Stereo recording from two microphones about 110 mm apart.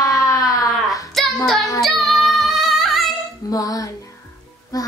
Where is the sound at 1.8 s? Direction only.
Centre (ahead or behind).